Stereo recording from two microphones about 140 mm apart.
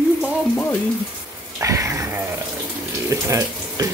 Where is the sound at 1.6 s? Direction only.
20° right (ahead or behind).